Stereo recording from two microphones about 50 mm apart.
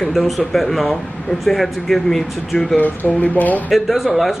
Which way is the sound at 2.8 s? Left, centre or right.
Left.